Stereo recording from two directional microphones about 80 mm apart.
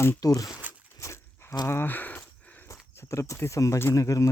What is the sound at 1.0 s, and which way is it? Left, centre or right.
Livestock, left.